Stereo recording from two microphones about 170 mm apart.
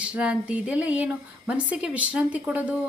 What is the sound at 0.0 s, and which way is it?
Speech, 5° right (ahead or behind).